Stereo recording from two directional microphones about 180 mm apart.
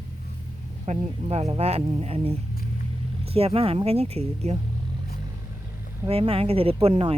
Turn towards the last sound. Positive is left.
turn(degrees=-35)  # may be behind; listen again after turning